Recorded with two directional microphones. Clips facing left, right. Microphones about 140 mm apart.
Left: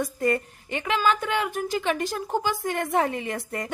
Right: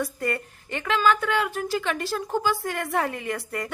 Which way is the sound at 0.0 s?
20° left (ahead or behind).